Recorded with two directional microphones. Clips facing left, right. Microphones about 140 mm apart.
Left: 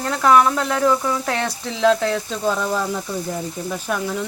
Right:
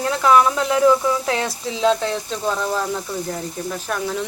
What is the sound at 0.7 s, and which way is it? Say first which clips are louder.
Speech: right 3 dB; 15° right (ahead or behind).